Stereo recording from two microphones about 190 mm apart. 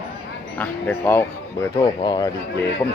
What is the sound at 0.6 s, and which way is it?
A man's voice, 10° left (ahead or behind).